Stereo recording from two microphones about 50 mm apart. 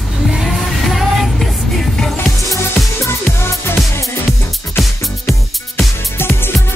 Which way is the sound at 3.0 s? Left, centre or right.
Left.